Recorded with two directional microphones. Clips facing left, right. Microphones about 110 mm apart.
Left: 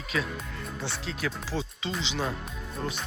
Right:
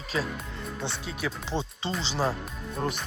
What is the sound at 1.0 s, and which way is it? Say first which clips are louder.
Speech: even; 15° right (ahead or behind).